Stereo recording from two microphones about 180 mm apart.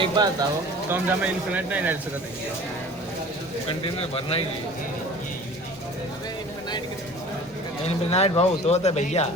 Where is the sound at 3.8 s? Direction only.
30° left (ahead or behind).